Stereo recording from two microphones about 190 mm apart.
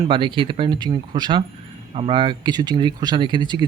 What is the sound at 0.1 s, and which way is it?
Speech, 25° right (ahead or behind).